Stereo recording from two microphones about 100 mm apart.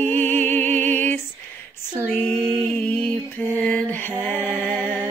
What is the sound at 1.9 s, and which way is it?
Female singing, 15° left (ahead or behind).